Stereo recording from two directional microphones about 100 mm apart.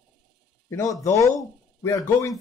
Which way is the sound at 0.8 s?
35° left (ahead or behind).